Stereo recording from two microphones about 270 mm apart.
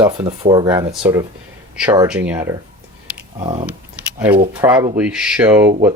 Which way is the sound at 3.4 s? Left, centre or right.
Centre.